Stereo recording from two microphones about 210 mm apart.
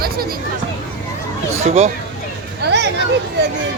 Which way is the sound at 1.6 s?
30° right (ahead or behind).